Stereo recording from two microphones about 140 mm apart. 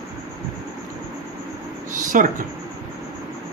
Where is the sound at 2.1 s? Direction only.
65° right (ahead or behind).